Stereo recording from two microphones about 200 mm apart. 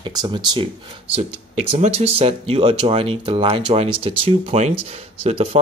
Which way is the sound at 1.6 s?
35° right (ahead or behind).